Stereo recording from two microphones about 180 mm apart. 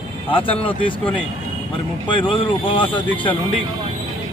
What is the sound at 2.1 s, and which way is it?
Speech, 30° left (ahead or behind).